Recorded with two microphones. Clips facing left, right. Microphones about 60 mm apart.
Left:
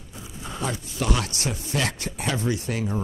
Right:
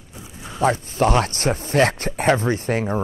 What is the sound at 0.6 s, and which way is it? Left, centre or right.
Speech, right.